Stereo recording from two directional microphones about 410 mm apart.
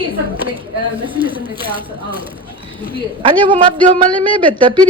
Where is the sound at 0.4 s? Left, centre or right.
Centre.